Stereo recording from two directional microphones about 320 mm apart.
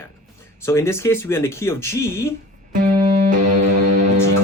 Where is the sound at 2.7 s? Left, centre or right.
Right.